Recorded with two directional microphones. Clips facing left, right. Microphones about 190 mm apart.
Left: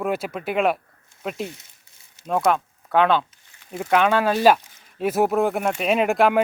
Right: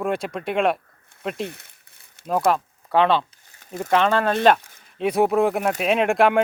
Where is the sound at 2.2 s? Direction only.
Centre (ahead or behind).